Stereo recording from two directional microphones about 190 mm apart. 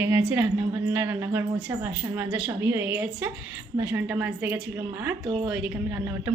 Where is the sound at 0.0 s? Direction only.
5° right (ahead or behind).